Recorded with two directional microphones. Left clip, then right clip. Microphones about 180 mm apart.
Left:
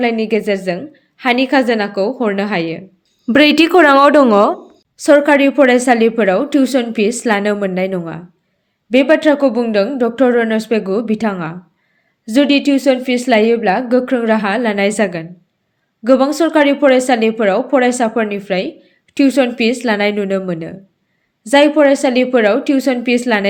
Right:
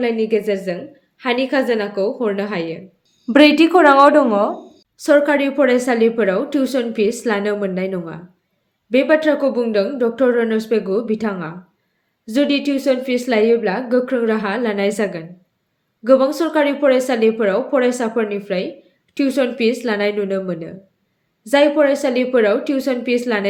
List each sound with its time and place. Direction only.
0.0 s a woman's voice: 40° left (ahead or behind)
3.2 s a woman's voice: 55° left (ahead or behind)
4.9 s a woman's voice: 35° left (ahead or behind)